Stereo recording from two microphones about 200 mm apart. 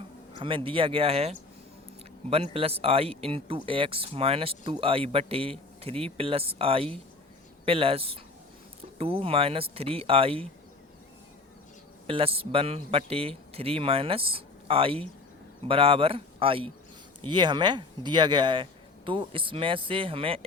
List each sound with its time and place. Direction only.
0.3 s speech: 25° right (ahead or behind)
12.0 s speech: 30° right (ahead or behind)